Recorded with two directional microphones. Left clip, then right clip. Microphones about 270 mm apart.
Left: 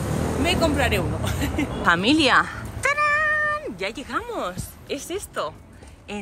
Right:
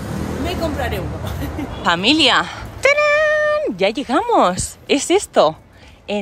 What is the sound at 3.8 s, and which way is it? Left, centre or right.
Speech, centre.